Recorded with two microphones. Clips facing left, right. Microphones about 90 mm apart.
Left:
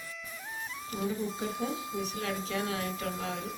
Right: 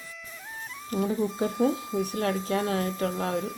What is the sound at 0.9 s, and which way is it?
Speech, 40° right (ahead or behind).